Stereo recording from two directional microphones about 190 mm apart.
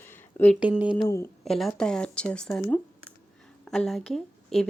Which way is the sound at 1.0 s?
15° left (ahead or behind).